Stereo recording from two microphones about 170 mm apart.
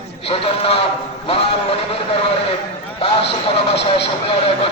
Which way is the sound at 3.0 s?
35° left (ahead or behind).